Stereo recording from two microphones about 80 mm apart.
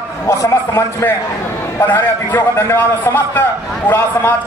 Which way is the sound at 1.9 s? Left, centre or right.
Left.